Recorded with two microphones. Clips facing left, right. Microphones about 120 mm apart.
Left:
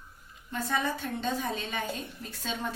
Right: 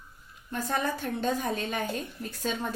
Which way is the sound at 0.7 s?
50° right (ahead or behind).